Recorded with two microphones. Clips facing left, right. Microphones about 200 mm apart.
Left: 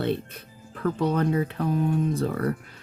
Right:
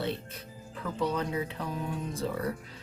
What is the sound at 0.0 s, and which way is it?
Speech, 60° left (ahead or behind).